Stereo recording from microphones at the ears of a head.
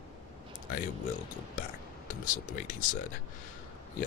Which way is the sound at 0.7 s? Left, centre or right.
Left.